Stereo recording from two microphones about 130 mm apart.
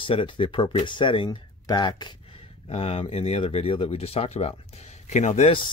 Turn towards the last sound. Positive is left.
turn(degrees=65)  # may be behind; listen again after turning